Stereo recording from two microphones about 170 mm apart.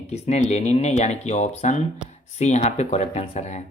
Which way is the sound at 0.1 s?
40° left (ahead or behind).